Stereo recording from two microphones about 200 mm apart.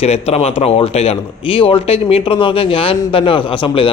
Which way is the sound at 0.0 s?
30° left (ahead or behind).